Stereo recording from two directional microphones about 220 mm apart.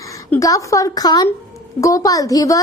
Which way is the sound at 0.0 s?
15° left (ahead or behind).